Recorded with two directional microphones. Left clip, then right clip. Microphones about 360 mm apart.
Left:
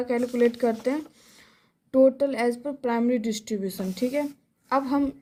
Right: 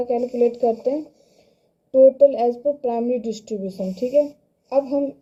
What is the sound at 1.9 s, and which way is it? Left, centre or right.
A woman's voice, left.